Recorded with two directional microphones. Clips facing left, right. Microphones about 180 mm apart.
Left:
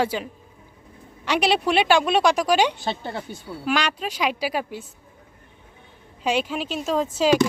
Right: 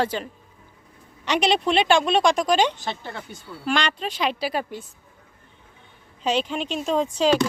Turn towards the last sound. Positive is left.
turn(degrees=5)  # may be behind; listen again after turning